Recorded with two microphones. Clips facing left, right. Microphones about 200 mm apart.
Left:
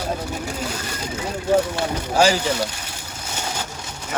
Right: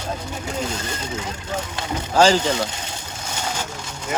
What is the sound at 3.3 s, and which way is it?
Vehicle, 10° left (ahead or behind).